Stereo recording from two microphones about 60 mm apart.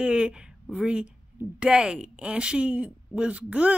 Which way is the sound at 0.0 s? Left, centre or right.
Centre.